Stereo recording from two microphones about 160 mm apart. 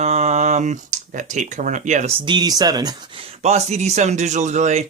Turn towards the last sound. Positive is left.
turn(degrees=-45)  # may be behind; listen again after turning